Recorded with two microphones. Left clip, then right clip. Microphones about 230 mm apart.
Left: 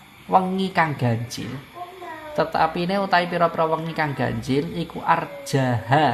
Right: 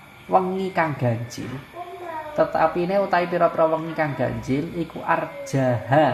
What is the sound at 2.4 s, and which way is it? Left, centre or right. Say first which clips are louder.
Speech: right 1 dB; left.